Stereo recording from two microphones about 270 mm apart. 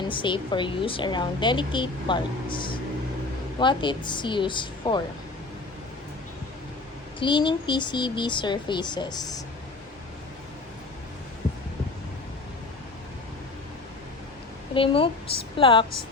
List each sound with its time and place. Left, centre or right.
0.1 s a woman's voice: centre
7.2 s a woman's voice: centre
14.8 s a woman's voice: centre